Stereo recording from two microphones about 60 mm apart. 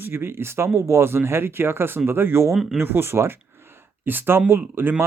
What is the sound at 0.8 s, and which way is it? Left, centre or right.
Speech, right.